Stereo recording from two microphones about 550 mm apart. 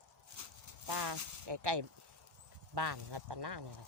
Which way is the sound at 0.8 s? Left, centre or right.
Right.